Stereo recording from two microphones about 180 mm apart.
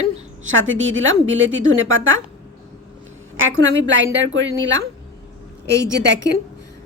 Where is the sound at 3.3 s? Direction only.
90° right.